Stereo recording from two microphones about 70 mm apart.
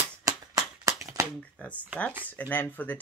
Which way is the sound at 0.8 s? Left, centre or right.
Right.